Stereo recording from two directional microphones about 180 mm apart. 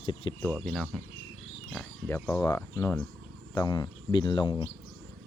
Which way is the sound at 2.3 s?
15° left (ahead or behind).